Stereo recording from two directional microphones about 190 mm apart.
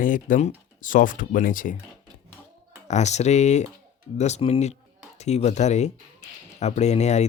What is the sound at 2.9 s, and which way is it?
Speech, 35° left (ahead or behind).